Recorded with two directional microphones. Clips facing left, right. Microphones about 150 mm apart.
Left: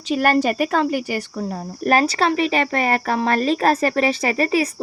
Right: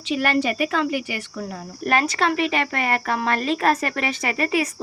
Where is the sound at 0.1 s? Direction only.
45° left (ahead or behind).